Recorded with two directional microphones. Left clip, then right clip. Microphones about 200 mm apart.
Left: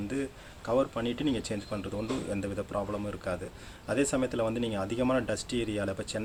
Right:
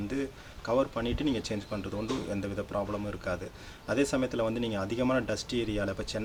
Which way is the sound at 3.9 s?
5° left (ahead or behind).